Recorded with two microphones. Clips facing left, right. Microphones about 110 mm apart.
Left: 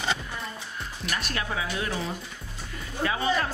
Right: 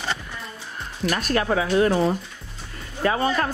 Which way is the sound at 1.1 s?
45° right (ahead or behind).